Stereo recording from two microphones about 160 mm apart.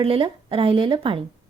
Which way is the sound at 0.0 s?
35° right (ahead or behind).